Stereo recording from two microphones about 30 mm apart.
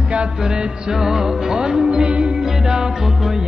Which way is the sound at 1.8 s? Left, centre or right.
Right.